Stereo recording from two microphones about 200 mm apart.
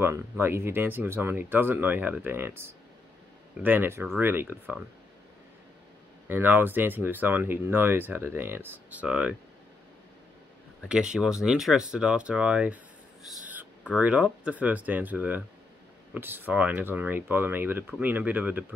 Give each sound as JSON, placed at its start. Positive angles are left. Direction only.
{"t": 0.0, "sound": "speech", "side_deg": -10}
{"t": 6.2, "sound": "speech", "side_deg": -10}
{"t": 10.9, "sound": "speech", "side_deg": -5}